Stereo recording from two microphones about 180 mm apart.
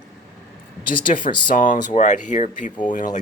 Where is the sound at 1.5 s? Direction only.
45° left (ahead or behind).